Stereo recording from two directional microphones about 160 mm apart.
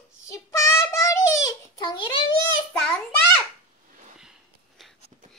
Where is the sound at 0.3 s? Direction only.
20° left (ahead or behind).